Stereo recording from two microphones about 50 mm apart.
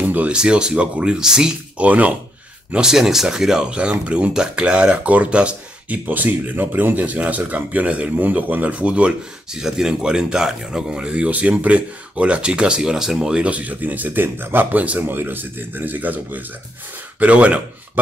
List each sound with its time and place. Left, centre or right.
0.0 s music: right
0.4 s speech: centre
1.8 s speech: right
2.7 s speech: centre
6.0 s speech: right
9.5 s speech: centre
13.4 s speech: right
15.0 s speech: right